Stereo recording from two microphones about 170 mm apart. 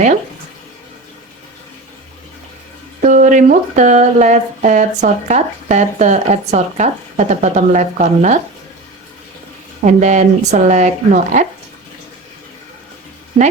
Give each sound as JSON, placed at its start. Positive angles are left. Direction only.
{"t": 3.0, "sound": "speech", "side_deg": -50}
{"t": 9.8, "sound": "speech", "side_deg": -45}